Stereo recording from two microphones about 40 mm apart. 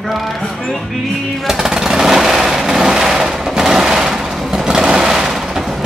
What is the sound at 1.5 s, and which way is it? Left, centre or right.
Jackhammer, centre.